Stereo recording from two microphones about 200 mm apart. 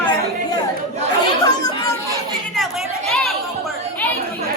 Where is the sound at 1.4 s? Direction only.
20° left (ahead or behind).